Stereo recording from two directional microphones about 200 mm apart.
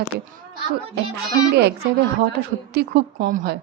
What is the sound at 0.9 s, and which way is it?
A child's voice, 60° right (ahead or behind).